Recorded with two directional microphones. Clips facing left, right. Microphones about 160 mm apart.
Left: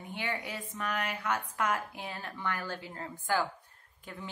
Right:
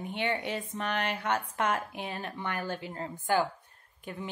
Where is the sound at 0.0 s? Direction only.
25° right (ahead or behind).